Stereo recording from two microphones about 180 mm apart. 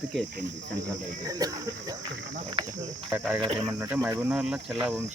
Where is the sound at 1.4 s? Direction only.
20° right (ahead or behind).